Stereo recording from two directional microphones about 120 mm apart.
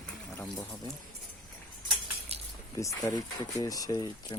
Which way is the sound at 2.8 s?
25° left (ahead or behind).